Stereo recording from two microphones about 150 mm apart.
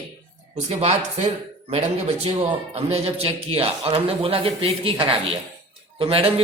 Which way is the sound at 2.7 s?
40° right (ahead or behind).